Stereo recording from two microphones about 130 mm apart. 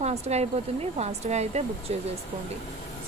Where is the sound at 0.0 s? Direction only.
55° right (ahead or behind).